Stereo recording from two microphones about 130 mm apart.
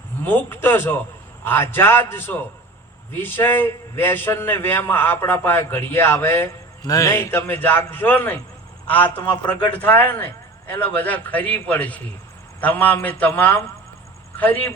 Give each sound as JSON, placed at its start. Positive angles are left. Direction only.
{"t": 0.2, "sound": "a man's voice", "side_deg": 15}